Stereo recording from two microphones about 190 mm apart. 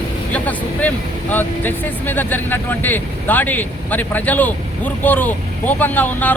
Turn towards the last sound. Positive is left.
turn(degrees=10)  # may be behind; listen again after turning